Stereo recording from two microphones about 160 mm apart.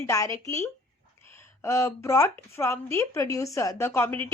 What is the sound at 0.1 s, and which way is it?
A woman's voice, 20° left (ahead or behind).